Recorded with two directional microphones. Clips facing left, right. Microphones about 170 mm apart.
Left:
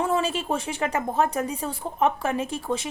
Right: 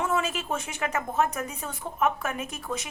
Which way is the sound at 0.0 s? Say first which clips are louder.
Left 3 dB; 30° left (ahead or behind).